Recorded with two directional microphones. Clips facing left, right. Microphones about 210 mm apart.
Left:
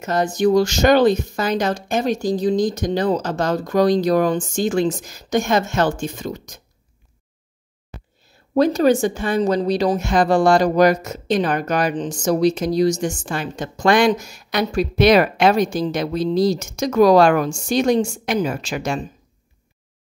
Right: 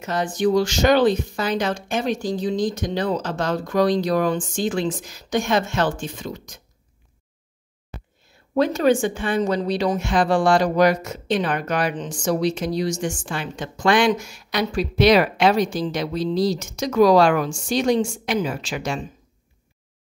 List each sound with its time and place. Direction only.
0.0 s speech: 40° left (ahead or behind)
8.5 s a woman's voice: 40° left (ahead or behind)